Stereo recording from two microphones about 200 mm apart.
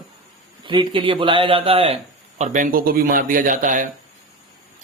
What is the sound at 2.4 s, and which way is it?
Speech, 40° right (ahead or behind).